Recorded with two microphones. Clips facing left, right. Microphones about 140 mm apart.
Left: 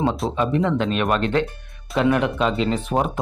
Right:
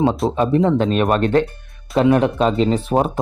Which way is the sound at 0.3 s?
40° right (ahead or behind).